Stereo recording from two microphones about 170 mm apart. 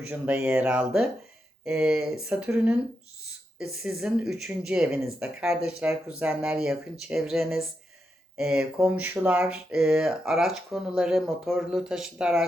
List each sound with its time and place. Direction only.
0.1 s speech: 10° right (ahead or behind)